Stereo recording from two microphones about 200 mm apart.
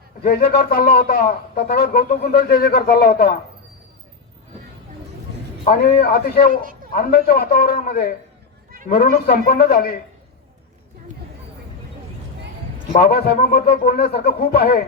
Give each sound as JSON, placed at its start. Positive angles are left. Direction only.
{"t": 0.2, "sound": "speech", "side_deg": 50}
{"t": 5.6, "sound": "speech", "side_deg": 50}
{"t": 12.9, "sound": "speech", "side_deg": 50}